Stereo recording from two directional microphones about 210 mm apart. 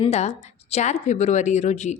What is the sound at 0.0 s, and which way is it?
A woman's voice, 30° left (ahead or behind).